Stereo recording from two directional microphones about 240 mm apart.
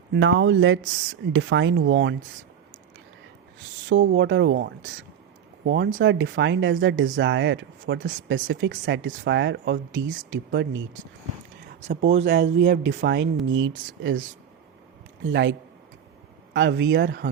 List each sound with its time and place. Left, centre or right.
0.1 s speech: right
3.8 s speech: right
11.8 s speech: right
12.2 s speech: right